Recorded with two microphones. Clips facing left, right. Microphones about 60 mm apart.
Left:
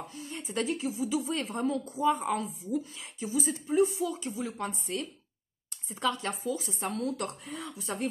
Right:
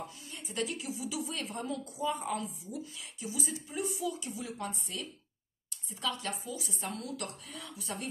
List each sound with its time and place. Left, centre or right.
0.1 s a woman's voice: left